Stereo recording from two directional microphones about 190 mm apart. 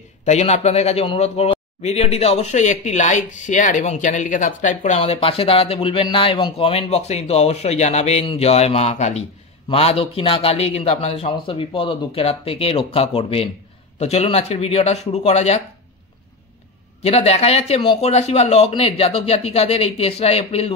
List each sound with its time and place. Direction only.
0.2 s a man's voice: 35° left (ahead or behind)
17.0 s a man's voice: 30° left (ahead or behind)